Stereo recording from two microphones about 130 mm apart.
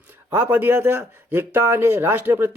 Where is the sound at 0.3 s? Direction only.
15° right (ahead or behind).